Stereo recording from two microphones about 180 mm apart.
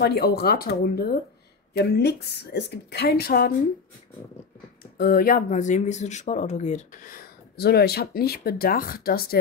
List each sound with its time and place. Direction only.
0.0 s a woman's voice: 60° left (ahead or behind)
4.9 s speech: 55° left (ahead or behind)